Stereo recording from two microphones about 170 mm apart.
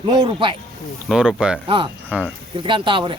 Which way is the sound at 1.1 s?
5° right (ahead or behind).